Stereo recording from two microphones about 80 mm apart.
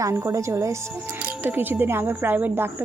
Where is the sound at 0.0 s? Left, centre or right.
Right.